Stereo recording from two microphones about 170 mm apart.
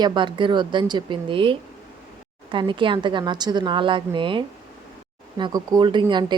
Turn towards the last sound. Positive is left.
turn(degrees=-25)  # may be behind; listen again after turning